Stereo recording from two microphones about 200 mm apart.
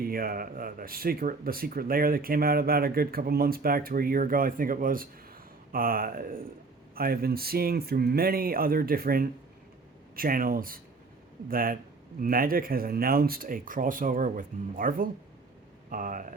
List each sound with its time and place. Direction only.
0.0 s speech: 45° right (ahead or behind)